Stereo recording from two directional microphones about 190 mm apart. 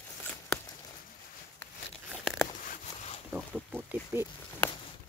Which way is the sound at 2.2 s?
Centre (ahead or behind).